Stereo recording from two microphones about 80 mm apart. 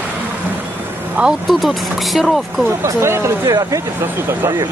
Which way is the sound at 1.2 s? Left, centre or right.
Centre.